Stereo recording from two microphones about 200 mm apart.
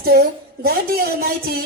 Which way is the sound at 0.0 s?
50° right (ahead or behind).